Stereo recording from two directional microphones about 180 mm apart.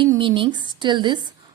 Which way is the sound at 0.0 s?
25° right (ahead or behind).